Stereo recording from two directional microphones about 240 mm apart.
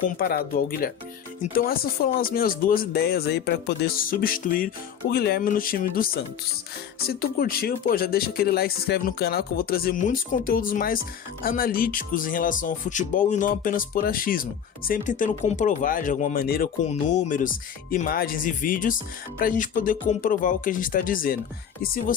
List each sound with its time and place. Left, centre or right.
0.2 s speech: left
7.1 s speech: left